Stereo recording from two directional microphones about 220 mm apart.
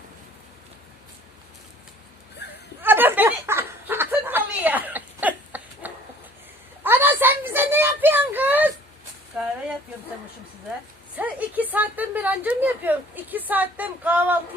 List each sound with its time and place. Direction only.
2.4 s dog: 50° left (ahead or behind)
2.8 s snicker: 10° right (ahead or behind)
6.8 s a sound: 10° right (ahead or behind)
11.2 s speech: 5° right (ahead or behind)